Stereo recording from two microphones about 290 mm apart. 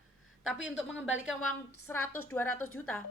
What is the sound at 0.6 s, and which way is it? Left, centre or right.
Speech, left.